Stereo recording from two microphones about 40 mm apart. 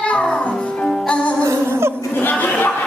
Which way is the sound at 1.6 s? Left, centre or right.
Right.